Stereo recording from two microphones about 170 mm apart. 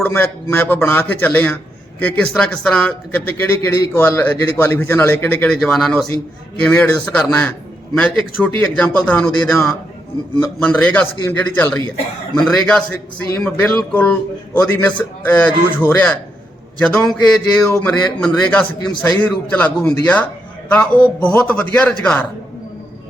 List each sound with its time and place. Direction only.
0.0 s a man's voice: 10° left (ahead or behind)
8.6 s a man's voice: 5° left (ahead or behind)